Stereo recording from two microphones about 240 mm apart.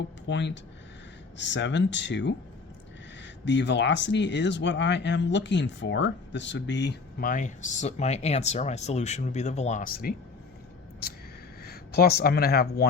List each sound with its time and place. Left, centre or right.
0.3 s speech: left
3.4 s speech: left
11.6 s speech: left